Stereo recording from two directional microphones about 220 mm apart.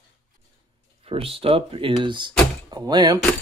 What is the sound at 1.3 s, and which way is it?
Speech, 25° right (ahead or behind).